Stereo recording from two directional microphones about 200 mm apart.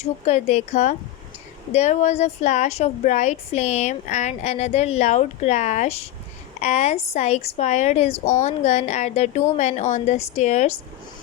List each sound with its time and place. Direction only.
0.0 s a woman's voice: 35° left (ahead or behind)